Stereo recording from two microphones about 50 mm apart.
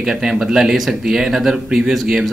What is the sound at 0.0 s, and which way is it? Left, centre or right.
Speech, centre.